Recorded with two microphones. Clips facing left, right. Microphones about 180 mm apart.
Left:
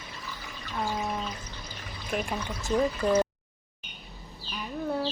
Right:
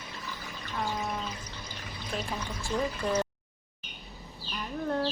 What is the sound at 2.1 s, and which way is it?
Speech, 20° left (ahead or behind).